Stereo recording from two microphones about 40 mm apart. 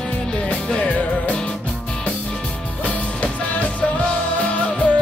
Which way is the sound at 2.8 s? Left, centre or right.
Left.